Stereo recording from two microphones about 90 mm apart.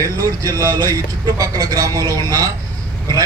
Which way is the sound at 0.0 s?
40° right (ahead or behind).